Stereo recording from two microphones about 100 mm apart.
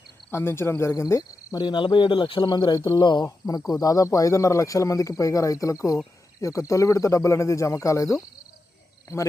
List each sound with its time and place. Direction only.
0.3 s speech: 25° left (ahead or behind)
1.6 s speech: 50° left (ahead or behind)
3.2 s speech: 35° left (ahead or behind)